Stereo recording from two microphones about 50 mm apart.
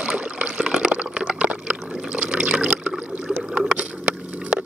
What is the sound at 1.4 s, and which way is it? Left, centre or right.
Liquid, right.